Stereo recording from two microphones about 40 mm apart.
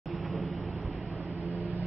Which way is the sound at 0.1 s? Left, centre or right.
Centre.